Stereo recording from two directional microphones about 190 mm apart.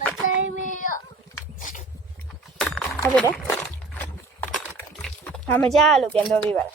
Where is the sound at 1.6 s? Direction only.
40° left (ahead or behind).